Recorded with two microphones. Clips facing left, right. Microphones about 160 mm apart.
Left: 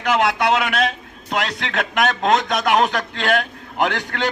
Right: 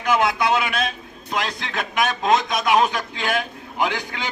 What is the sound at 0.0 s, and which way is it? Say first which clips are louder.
A man's voice: left 1 dB; 75° left (ahead or behind).